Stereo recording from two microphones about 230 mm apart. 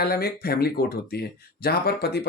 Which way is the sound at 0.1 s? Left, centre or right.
Left.